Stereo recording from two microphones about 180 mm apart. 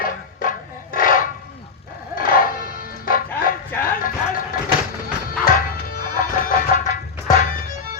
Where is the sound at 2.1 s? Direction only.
50° left (ahead or behind).